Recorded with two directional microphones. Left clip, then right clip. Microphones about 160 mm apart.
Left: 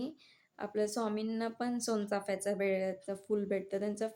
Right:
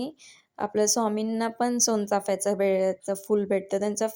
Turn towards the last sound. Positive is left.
turn(degrees=-40)  # may be behind; listen again after turning